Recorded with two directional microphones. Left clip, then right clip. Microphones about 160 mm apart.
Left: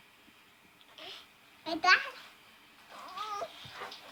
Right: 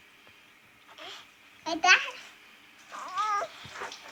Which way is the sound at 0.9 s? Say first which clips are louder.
Right 3 dB; 10° left (ahead or behind).